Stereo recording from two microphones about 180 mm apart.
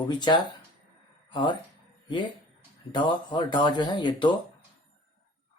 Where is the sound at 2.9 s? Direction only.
25° left (ahead or behind).